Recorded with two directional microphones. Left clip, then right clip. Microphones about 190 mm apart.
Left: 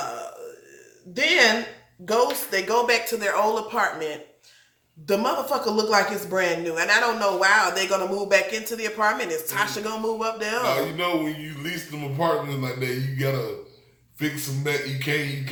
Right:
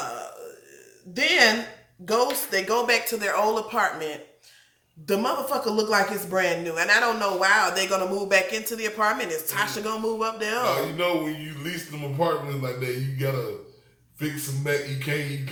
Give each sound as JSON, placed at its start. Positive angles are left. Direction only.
{"t": 0.0, "sound": "burping", "side_deg": -20}
{"t": 1.1, "sound": "a woman's voice", "side_deg": -20}
{"t": 10.7, "sound": "a man's voice", "side_deg": 15}